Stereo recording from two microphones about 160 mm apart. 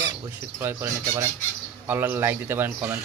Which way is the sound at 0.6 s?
15° right (ahead or behind).